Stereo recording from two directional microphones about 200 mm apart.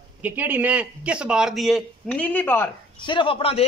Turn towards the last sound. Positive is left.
turn(degrees=25)  # may be behind; listen again after turning